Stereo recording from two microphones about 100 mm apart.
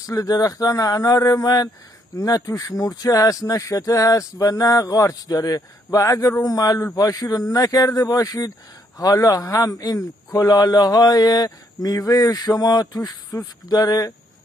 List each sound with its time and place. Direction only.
0.0 s a man's voice: 35° left (ahead or behind)